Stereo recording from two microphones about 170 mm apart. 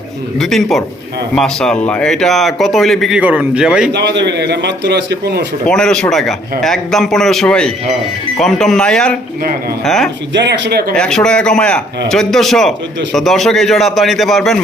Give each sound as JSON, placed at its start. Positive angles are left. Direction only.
{"t": 0.3, "sound": "speech", "side_deg": 0}
{"t": 3.9, "sound": "a man's voice", "side_deg": -90}
{"t": 5.6, "sound": "speech", "side_deg": 5}
{"t": 10.3, "sound": "speech", "side_deg": -90}
{"t": 10.9, "sound": "speech", "side_deg": 5}